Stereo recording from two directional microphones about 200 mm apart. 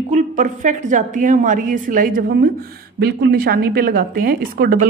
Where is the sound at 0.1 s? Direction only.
40° right (ahead or behind).